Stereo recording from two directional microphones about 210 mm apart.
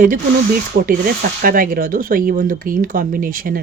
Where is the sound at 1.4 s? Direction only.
40° right (ahead or behind).